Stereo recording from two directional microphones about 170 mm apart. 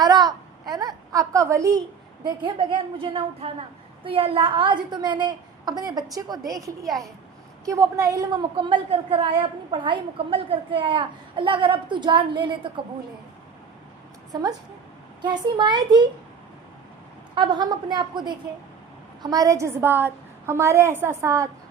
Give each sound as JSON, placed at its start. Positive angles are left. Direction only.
{"t": 0.0, "sound": "a sound", "side_deg": -25}
{"t": 2.2, "sound": "a woman's voice", "side_deg": -30}
{"t": 15.2, "sound": "a woman's voice", "side_deg": -25}
{"t": 17.3, "sound": "a woman's voice", "side_deg": -25}